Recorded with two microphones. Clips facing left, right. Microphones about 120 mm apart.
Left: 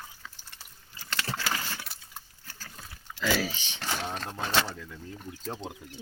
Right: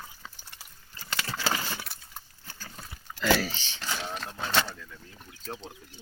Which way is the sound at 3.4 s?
15° left (ahead or behind).